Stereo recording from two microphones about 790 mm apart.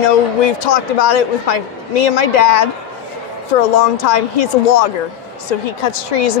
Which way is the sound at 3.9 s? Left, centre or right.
Left.